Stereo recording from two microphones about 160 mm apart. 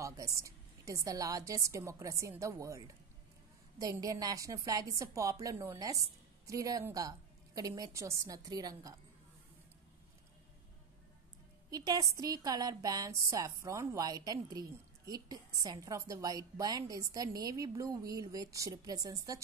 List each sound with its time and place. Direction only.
0.0 s a woman's voice: 20° right (ahead or behind)
11.7 s a woman's voice: 25° right (ahead or behind)